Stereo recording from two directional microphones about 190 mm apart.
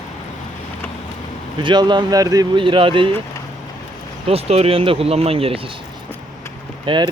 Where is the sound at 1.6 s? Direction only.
25° right (ahead or behind).